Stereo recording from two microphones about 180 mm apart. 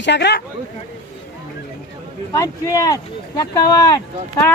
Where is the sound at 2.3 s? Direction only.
20° left (ahead or behind).